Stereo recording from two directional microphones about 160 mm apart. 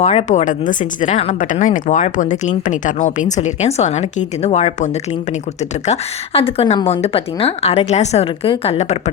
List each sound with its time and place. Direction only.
0.0 s speech: 40° left (ahead or behind)